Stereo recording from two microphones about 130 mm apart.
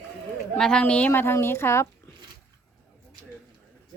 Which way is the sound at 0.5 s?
5° left (ahead or behind).